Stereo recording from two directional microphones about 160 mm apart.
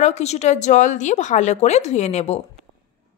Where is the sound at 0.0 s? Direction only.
45° left (ahead or behind).